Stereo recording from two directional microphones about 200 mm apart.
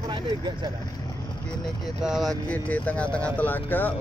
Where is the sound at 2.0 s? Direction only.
Centre (ahead or behind).